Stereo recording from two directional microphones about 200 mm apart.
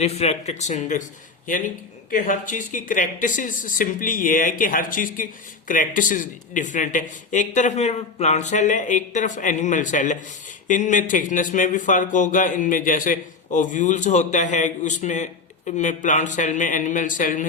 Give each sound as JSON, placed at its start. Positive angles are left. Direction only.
{"t": 0.0, "sound": "speech", "side_deg": 30}
{"t": 2.0, "sound": "speech", "side_deg": 40}